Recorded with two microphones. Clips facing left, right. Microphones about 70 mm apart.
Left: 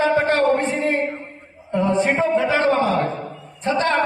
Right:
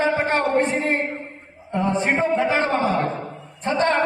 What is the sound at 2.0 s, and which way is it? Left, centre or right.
Speech, right.